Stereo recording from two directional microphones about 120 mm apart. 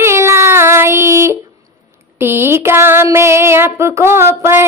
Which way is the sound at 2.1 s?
20° right (ahead or behind).